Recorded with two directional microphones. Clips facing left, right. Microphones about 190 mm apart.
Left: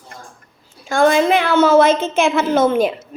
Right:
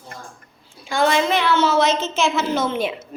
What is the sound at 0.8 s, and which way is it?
A woman's voice, 45° left (ahead or behind).